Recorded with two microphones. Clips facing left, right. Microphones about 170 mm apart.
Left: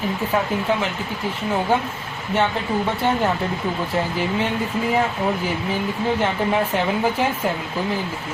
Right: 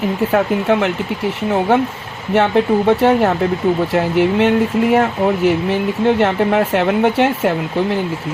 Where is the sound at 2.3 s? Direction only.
75° right (ahead or behind).